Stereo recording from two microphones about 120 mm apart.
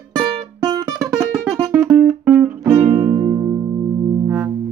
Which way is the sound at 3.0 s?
35° right (ahead or behind).